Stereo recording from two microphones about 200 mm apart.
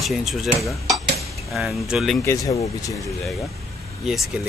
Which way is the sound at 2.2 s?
15° left (ahead or behind).